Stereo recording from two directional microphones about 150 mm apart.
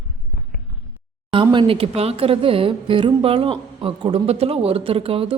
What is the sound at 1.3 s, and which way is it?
A woman's voice, 35° right (ahead or behind).